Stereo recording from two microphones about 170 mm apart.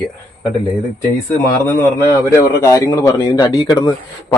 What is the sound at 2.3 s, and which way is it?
Speech, 15° left (ahead or behind).